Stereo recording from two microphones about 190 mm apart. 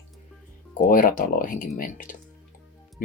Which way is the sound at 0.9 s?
45° left (ahead or behind).